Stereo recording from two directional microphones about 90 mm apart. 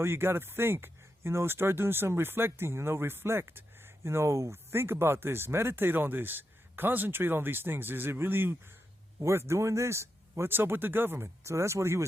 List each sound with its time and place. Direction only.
0.0 s speech: 25° right (ahead or behind)